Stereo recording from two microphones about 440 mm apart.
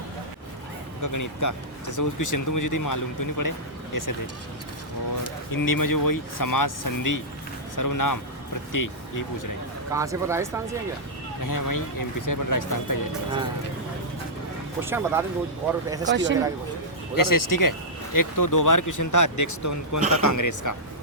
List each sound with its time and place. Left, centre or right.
1.0 s speech: left
5.5 s speech: left
9.9 s speech: centre
11.4 s speech: left
14.8 s speech: centre
16.0 s speech: right
17.2 s speech: left